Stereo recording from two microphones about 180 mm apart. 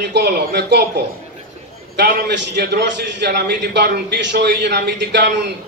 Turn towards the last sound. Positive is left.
turn(degrees=-70)  # may be behind; listen again after turning